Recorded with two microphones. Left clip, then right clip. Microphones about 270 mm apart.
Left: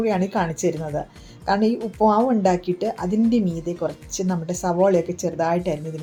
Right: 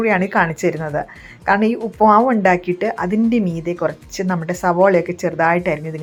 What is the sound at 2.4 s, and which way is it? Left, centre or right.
A woman's voice, right.